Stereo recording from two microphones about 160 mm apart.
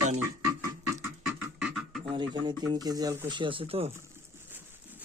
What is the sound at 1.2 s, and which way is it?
Beatboxing, 5° right (ahead or behind).